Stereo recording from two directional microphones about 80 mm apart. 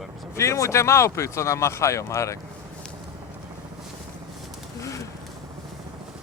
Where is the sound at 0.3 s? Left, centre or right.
Left.